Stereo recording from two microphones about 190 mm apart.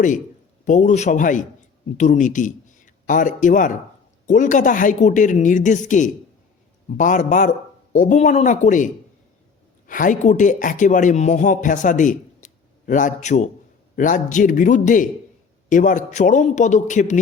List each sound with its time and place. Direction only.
0.6 s a man's voice: 40° left (ahead or behind)